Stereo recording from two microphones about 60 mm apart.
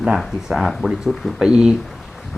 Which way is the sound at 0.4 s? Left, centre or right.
Centre.